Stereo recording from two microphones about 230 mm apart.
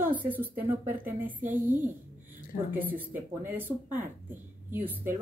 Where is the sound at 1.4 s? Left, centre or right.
Right.